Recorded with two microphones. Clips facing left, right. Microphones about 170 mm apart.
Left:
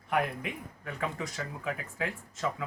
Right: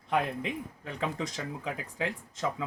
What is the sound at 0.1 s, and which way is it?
Speech, 25° right (ahead or behind).